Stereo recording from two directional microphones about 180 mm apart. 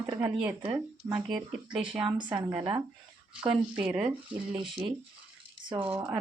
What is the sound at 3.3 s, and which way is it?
Speech, 5° right (ahead or behind).